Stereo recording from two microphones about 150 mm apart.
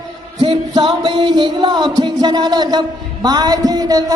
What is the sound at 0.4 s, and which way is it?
Music, 35° right (ahead or behind).